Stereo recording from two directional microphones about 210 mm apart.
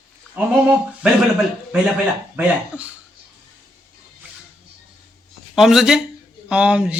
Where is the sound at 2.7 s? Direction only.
5° right (ahead or behind).